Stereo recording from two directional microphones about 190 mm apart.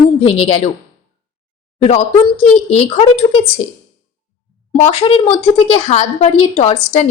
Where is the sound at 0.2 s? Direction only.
30° left (ahead or behind).